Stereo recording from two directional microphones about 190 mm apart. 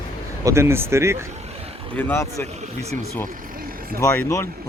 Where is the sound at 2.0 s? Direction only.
10° left (ahead or behind).